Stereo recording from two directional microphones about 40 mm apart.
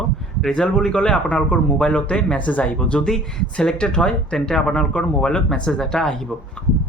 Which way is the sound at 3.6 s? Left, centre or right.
Centre.